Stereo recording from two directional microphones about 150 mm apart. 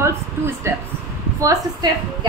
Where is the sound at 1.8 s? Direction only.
25° right (ahead or behind).